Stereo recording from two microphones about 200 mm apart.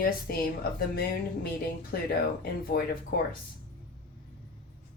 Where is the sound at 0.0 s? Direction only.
50° left (ahead or behind).